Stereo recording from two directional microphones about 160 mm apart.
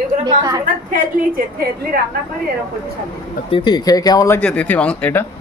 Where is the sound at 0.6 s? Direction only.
60° right (ahead or behind).